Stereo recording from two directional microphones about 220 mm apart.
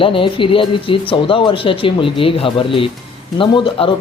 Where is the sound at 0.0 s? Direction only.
25° left (ahead or behind).